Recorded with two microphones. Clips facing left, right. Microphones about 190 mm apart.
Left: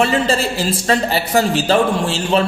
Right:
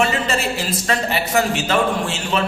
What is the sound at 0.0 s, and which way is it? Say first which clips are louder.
Speech: left 4 dB; 30° left (ahead or behind).